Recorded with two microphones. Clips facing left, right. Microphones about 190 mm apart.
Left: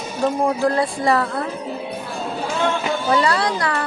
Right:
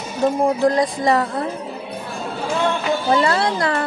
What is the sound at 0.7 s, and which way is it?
Speech, 20° right (ahead or behind).